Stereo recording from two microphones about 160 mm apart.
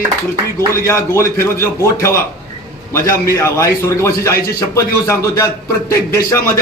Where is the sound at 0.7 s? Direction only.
15° left (ahead or behind).